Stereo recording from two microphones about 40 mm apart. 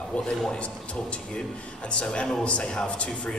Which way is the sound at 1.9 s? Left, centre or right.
Left.